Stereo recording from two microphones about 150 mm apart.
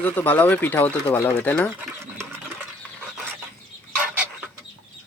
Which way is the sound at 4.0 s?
10° right (ahead or behind).